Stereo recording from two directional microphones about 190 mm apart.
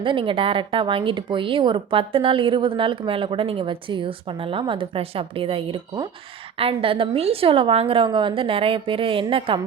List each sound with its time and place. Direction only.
0.0 s speech: 25° right (ahead or behind)